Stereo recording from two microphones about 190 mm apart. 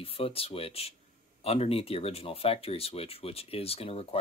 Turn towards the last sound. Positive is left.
turn(degrees=30)  # may be behind; listen again after turning